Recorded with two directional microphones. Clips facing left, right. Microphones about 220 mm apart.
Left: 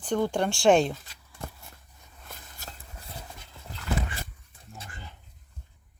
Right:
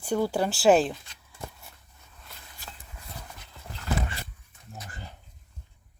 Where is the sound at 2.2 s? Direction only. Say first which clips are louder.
Left 2 dB; 45° left (ahead or behind).